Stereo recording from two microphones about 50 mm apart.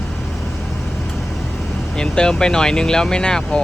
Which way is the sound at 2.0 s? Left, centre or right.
Centre.